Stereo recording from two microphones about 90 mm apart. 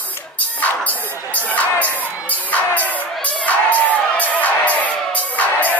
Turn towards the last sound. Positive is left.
turn(degrees=15)  # may be behind; listen again after turning